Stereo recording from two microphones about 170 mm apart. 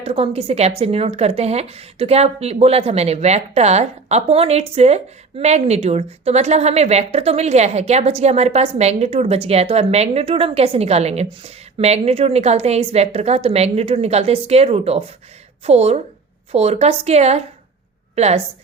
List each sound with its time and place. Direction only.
0.0 s a woman's voice: 35° right (ahead or behind)